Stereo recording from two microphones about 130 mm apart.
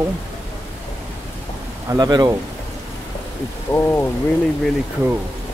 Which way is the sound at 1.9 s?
30° right (ahead or behind).